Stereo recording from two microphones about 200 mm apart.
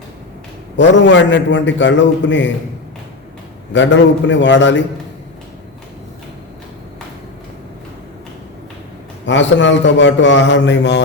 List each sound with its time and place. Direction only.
0.8 s a man's voice: 65° left (ahead or behind)
3.7 s a man's voice: 65° left (ahead or behind)
9.2 s a man's voice: 65° left (ahead or behind)